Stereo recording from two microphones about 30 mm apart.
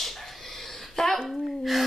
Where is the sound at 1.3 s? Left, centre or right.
Centre.